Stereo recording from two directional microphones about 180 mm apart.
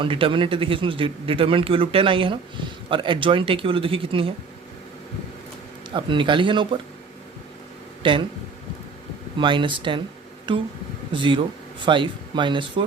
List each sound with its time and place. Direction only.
0.0 s a man's voice: 30° right (ahead or behind)
5.9 s a man's voice: 25° right (ahead or behind)
8.0 s a man's voice: 30° right (ahead or behind)
9.4 s a man's voice: 25° right (ahead or behind)